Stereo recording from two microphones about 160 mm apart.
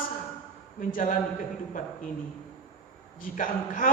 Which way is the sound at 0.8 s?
60° left (ahead or behind).